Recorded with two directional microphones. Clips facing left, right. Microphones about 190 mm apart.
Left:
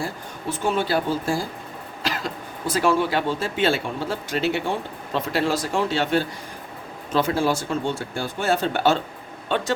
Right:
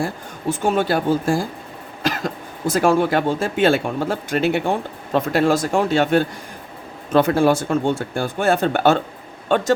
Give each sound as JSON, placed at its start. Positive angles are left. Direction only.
{"t": 0.5, "sound": "speech", "side_deg": -50}